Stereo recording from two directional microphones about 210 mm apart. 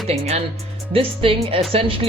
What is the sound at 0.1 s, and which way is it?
Speech, 30° right (ahead or behind).